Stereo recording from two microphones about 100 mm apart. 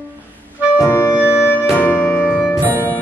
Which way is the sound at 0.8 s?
25° left (ahead or behind).